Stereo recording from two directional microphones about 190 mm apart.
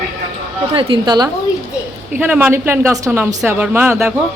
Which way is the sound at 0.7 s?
25° right (ahead or behind).